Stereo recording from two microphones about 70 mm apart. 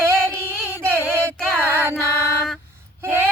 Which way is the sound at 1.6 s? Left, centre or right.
Right.